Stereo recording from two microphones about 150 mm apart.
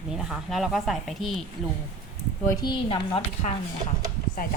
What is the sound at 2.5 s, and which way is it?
Speech, 25° left (ahead or behind).